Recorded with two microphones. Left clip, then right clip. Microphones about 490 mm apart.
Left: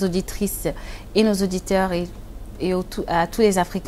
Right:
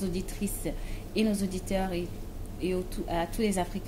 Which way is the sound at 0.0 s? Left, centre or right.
Left.